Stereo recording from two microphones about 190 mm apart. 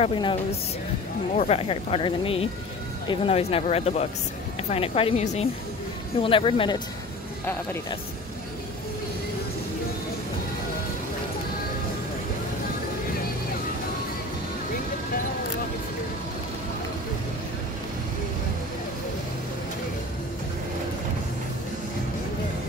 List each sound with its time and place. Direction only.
0.0 s speech: 25° left (ahead or behind)